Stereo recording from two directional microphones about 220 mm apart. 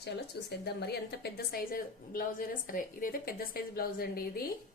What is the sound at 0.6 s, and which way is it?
A woman's voice, 45° left (ahead or behind).